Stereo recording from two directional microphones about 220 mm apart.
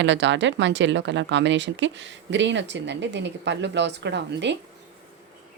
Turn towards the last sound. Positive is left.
turn(degrees=-50)  # may be behind; listen again after turning